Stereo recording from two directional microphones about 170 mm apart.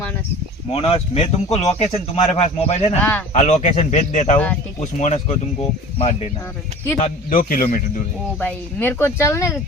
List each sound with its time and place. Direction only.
0.7 s speech: 35° left (ahead or behind)
3.0 s speech: 10° left (ahead or behind)
3.3 s speech: 45° left (ahead or behind)
7.0 s speech: 55° left (ahead or behind)
8.4 s speech: 10° left (ahead or behind)